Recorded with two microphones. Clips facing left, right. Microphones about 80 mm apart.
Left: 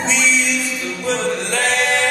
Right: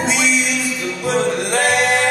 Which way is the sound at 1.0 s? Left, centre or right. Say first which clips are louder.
Right 2 dB; centre.